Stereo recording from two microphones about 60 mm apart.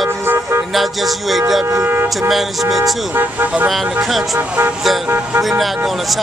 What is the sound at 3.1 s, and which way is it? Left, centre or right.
Speech, right.